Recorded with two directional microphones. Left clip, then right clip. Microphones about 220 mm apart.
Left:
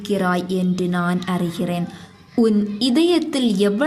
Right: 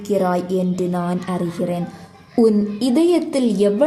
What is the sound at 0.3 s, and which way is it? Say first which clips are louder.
A woman's voice: right 2 dB; 20° left (ahead or behind).